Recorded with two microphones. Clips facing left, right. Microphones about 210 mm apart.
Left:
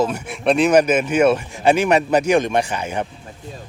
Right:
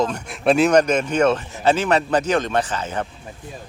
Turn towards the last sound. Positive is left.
turn(degrees=15)  # may be behind; listen again after turning